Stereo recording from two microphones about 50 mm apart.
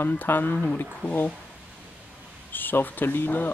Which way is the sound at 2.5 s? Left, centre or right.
Left.